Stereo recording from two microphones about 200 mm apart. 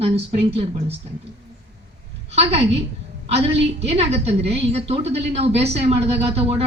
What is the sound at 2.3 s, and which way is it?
A woman's voice, 30° right (ahead or behind).